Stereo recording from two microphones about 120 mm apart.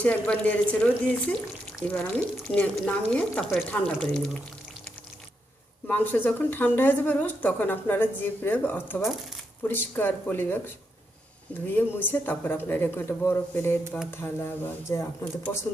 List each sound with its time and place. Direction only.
0.0 s a woman's voice: 10° left (ahead or behind)
5.9 s a woman's voice: 15° left (ahead or behind)
11.6 s a woman's voice: 15° left (ahead or behind)